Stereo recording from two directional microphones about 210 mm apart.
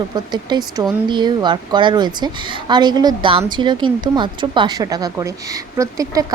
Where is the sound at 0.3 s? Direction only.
20° right (ahead or behind).